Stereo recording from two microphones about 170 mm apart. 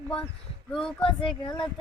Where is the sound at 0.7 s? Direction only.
5° left (ahead or behind).